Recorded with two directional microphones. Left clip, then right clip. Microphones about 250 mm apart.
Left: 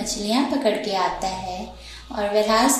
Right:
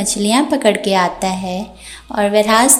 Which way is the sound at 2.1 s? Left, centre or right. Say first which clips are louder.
Right 7 dB; right.